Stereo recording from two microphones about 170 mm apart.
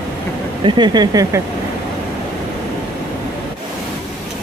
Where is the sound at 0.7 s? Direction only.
25° right (ahead or behind).